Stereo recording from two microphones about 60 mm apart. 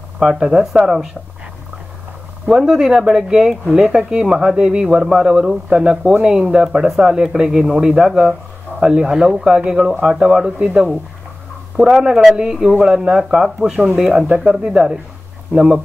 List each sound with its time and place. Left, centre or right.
0.2 s speech: centre
2.4 s speech: centre
13.9 s speech: right